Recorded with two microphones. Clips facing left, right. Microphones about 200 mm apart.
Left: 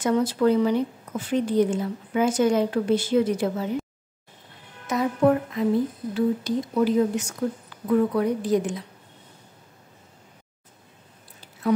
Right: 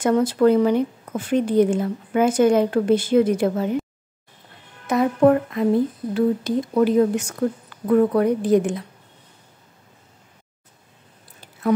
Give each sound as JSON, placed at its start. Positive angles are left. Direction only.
{"t": 0.0, "sound": "a woman's voice", "side_deg": -55}
{"t": 4.8, "sound": "a woman's voice", "side_deg": -60}